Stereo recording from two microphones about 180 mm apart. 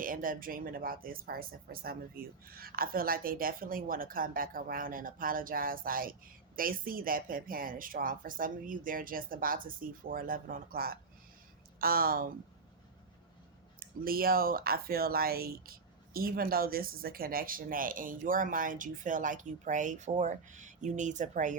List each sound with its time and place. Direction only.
0.0 s speech: 50° right (ahead or behind)
13.7 s speech: 55° right (ahead or behind)